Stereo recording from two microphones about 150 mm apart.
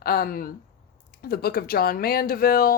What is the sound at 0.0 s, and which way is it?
Speech, 85° left.